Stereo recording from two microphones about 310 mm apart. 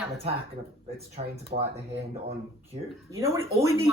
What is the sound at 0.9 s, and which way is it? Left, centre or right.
Speech, centre.